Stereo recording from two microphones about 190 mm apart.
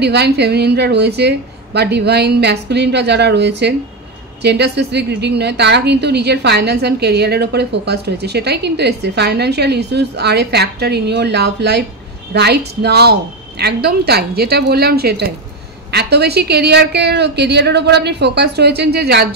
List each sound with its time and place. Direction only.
0.0 s a woman's voice: 60° right (ahead or behind)